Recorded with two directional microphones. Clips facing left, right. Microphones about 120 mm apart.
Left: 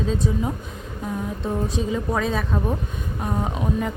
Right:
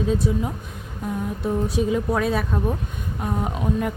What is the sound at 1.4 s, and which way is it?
Speech, 10° right (ahead or behind).